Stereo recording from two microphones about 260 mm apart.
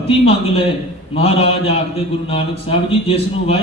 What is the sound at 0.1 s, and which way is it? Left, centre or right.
A man's voice, left.